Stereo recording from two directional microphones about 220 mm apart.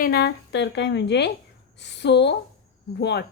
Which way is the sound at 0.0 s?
45° left (ahead or behind).